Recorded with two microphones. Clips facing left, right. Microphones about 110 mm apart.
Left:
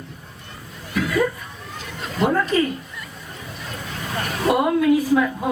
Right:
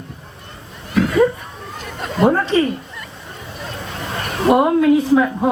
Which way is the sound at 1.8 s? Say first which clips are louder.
Right 6 dB; 50° right (ahead or behind).